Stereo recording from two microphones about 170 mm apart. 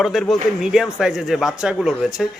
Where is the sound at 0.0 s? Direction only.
Centre (ahead or behind).